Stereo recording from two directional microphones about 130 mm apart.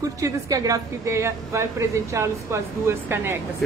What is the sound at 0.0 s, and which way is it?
Speech, 25° right (ahead or behind).